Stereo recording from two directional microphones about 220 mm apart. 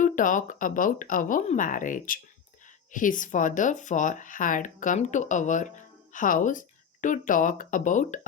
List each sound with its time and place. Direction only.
0.0 s speech: 35° left (ahead or behind)